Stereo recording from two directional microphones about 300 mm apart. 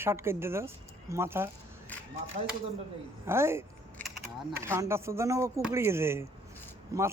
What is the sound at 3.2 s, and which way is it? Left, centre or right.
Speech, centre.